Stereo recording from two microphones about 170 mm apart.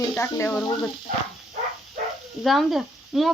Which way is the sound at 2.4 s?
Centre (ahead or behind).